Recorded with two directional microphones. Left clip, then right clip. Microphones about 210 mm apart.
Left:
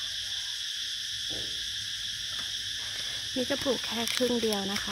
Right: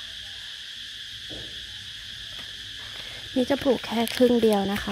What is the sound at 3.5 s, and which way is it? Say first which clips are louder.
Cricket: right 6 dB; 35° right (ahead or behind).